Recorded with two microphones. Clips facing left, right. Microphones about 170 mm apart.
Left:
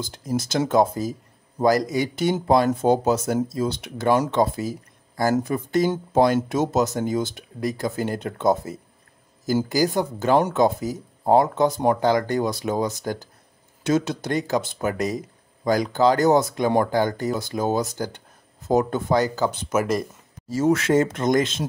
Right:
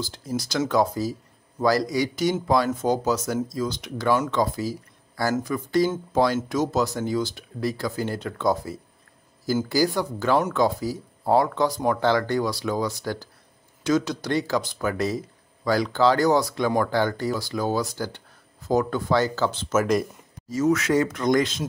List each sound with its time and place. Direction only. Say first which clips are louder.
0.0 s speech: left 3 dB; 20° left (ahead or behind)
2.1 s speech: left 2 dB; 60° left (ahead or behind)
2.4 s speech: left 6 dB; 25° left (ahead or behind)
20.4 s speech: left 2 dB; 30° left (ahead or behind)